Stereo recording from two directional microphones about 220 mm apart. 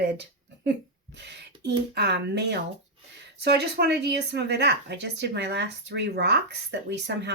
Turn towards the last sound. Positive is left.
turn(degrees=-50)  # may be behind; listen again after turning